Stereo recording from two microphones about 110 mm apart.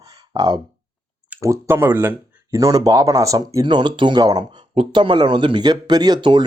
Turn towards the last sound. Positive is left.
turn(degrees=-45)  # may be behind; listen again after turning